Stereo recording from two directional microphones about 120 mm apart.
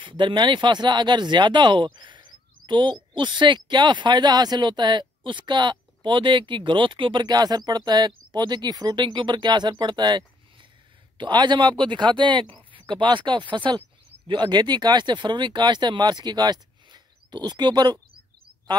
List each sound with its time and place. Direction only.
0.0 s speech: 40° right (ahead or behind)